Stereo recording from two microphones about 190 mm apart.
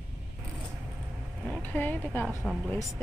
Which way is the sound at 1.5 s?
10° left (ahead or behind).